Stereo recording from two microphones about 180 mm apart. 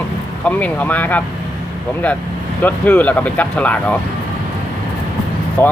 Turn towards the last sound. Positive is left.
turn(degrees=15)  # may be behind; listen again after turning